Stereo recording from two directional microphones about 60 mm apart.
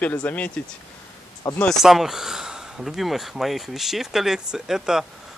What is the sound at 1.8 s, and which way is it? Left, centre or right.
Speech, centre.